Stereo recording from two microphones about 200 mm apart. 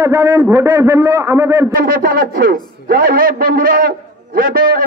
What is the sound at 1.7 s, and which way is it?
A man's voice, 45° right (ahead or behind).